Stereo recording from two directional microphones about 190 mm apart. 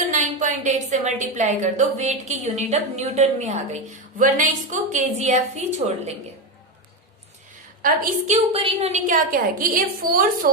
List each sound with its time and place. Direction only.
0.1 s a woman's voice: 40° right (ahead or behind)
7.8 s a woman's voice: 50° right (ahead or behind)
8.5 s a woman's voice: 35° right (ahead or behind); by 10.5 s 50° right (ahead or behind)